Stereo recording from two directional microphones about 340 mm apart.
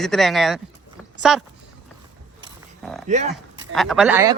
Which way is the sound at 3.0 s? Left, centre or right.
Right.